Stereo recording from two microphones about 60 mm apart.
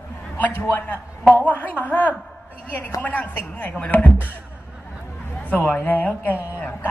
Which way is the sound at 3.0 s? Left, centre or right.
Left.